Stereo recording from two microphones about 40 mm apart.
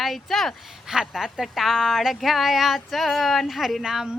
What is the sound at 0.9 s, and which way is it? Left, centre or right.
Speech, centre.